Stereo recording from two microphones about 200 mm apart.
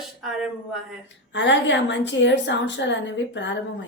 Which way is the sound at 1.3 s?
65° left (ahead or behind).